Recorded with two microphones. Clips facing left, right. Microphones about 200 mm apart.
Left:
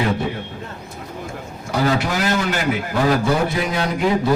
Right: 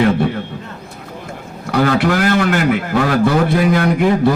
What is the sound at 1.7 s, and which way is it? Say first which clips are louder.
A man's voice: right 5 dB; 60° right (ahead or behind).